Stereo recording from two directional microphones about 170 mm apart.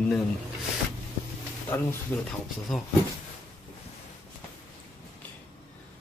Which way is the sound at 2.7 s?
Centre (ahead or behind).